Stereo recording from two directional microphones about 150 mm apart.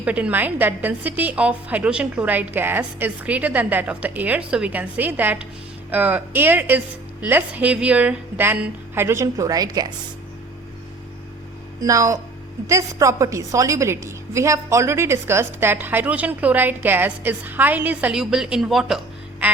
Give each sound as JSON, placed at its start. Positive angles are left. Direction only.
{"t": 0.0, "sound": "a woman's voice", "side_deg": -10}
{"t": 11.8, "sound": "a woman's voice", "side_deg": -20}